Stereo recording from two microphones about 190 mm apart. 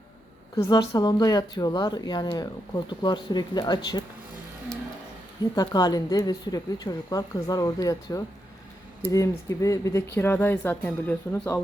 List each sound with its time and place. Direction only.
0.5 s speech: 20° left (ahead or behind)
5.5 s speech: 20° left (ahead or behind)